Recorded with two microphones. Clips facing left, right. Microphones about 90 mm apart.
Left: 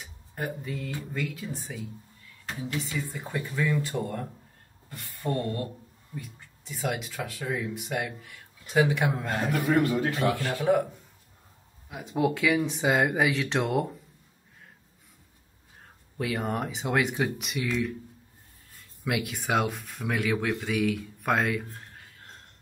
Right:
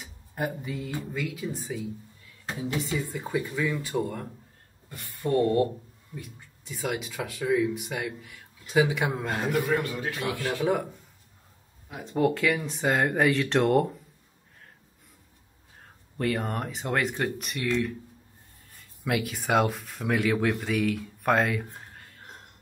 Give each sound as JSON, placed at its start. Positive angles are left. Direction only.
{"t": 0.4, "sound": "speech", "side_deg": -10}
{"t": 3.1, "sound": "speech", "side_deg": 0}
{"t": 9.8, "sound": "a man's voice", "side_deg": 35}
{"t": 10.4, "sound": "speech", "side_deg": 0}
{"t": 11.9, "sound": "speech", "side_deg": 5}
{"t": 16.2, "sound": "speech", "side_deg": 0}
{"t": 21.9, "sound": "a sound", "side_deg": 0}